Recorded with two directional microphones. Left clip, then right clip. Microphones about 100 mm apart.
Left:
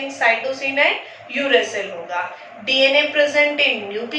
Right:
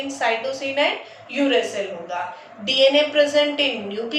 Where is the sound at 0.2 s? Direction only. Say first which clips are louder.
Left 5 dB; 35° right (ahead or behind).